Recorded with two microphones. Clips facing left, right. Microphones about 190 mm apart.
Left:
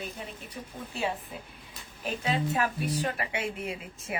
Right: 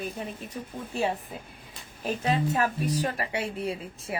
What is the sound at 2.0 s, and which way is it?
A woman's voice, 40° right (ahead or behind).